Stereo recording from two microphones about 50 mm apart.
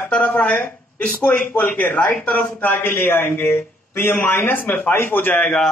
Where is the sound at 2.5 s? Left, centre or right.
Left.